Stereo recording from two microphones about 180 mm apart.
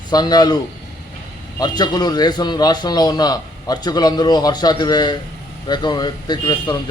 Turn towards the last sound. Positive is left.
turn(degrees=25)  # may be behind; listen again after turning